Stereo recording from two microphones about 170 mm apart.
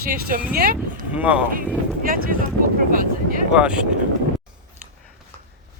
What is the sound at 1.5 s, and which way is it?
Speech, 55° right (ahead or behind).